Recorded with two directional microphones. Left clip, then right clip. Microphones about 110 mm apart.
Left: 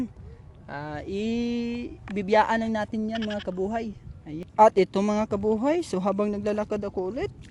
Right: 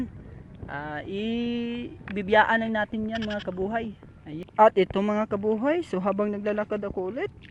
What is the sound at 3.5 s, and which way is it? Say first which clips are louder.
Speech: even; 15° left (ahead or behind).